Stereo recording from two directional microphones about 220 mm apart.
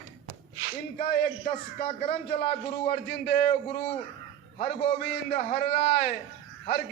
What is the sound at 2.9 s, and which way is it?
Speech, 50° left (ahead or behind).